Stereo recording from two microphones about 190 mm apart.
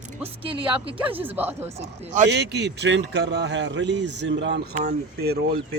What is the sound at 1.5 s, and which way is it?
Speech, 35° right (ahead or behind).